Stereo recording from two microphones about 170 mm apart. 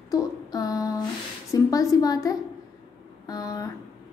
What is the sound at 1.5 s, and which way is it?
A woman's voice, 20° left (ahead or behind).